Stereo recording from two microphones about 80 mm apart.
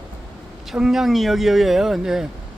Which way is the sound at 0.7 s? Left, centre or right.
Centre.